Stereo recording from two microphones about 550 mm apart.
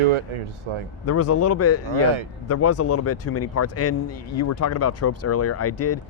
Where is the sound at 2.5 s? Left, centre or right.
Left.